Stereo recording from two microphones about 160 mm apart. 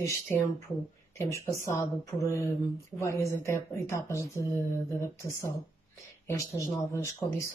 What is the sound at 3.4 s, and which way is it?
Speech, 15° left (ahead or behind).